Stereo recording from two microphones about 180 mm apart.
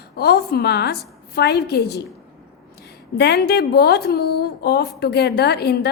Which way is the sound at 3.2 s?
65° left (ahead or behind).